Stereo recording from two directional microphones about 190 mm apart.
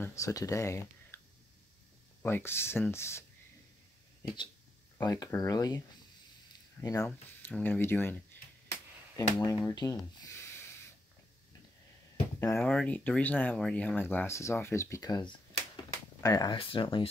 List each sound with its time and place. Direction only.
0.0 s speech: 15° left (ahead or behind)
2.2 s speech: 10° left (ahead or behind)
4.9 s speech: 15° left (ahead or behind)
6.8 s speech: 15° left (ahead or behind)
9.7 s a sound: 15° left (ahead or behind)
12.5 s speech: 5° left (ahead or behind); by 17.1 s 25° left (ahead or behind)